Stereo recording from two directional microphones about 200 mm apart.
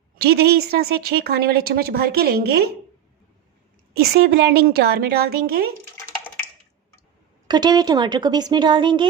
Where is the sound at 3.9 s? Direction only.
55° right (ahead or behind).